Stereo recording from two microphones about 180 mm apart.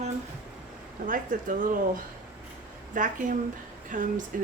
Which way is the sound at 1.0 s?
50° right (ahead or behind).